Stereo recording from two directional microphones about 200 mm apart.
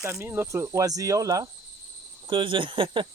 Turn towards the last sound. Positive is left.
turn(degrees=-25)  # may be behind; listen again after turning